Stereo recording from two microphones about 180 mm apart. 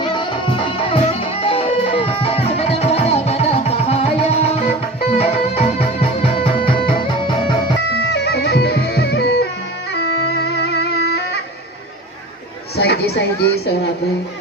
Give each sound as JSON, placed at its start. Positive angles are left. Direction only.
{"t": 0.0, "sound": "music", "side_deg": 25}
{"t": 7.9, "sound": "music", "side_deg": 70}
{"t": 12.7, "sound": "chatter", "side_deg": 65}